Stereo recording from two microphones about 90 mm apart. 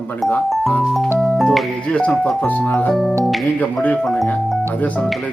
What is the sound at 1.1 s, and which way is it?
Music, centre (ahead or behind).